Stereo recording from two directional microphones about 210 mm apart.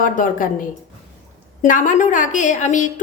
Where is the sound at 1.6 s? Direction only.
40° left (ahead or behind).